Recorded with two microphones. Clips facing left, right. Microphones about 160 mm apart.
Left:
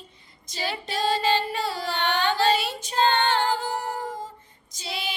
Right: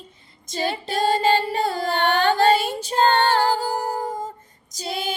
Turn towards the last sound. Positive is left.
turn(degrees=-50)  # may be behind; listen again after turning